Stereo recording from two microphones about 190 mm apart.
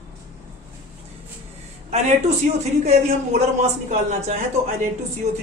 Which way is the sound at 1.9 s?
35° right (ahead or behind).